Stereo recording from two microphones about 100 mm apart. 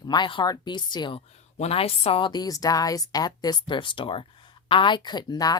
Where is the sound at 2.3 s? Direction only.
40° left (ahead or behind).